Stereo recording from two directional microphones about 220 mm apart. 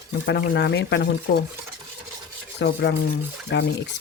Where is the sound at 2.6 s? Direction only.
55° left (ahead or behind).